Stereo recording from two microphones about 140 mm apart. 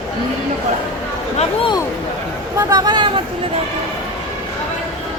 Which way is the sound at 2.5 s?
25° right (ahead or behind).